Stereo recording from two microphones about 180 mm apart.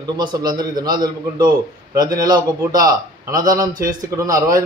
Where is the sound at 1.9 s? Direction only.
20° right (ahead or behind).